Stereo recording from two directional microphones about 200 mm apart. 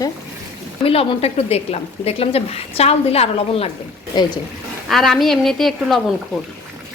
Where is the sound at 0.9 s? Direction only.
30° left (ahead or behind).